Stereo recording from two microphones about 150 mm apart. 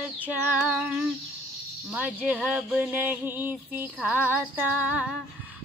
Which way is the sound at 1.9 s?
10° right (ahead or behind).